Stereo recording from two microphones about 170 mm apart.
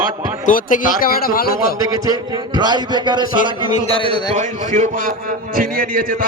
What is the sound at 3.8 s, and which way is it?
Speech, 30° left (ahead or behind).